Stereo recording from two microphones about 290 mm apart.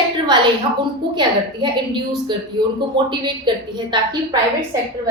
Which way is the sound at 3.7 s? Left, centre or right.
Centre.